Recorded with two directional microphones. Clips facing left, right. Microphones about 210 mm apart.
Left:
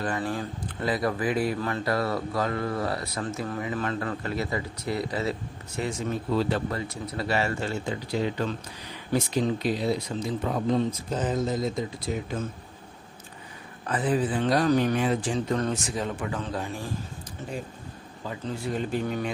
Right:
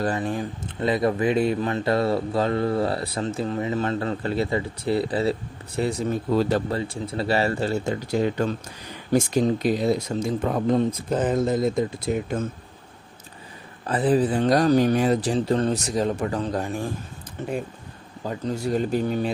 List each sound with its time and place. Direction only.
0.1 s speech: 20° right (ahead or behind); by 6.6 s 40° right (ahead or behind)
6.7 s speech: 30° right (ahead or behind); by 12.4 s 55° right (ahead or behind)
13.8 s speech: 35° right (ahead or behind)
18.3 s speech: 40° right (ahead or behind)